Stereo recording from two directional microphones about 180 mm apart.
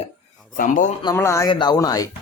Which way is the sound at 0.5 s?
50° left (ahead or behind).